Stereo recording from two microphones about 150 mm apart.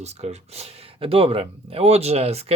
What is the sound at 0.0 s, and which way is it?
Speech, 45° right (ahead or behind).